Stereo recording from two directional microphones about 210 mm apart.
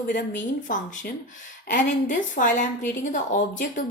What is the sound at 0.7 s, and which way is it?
A woman's voice, 40° left (ahead or behind).